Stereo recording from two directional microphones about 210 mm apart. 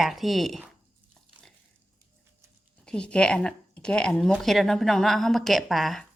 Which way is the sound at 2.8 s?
5° left (ahead or behind).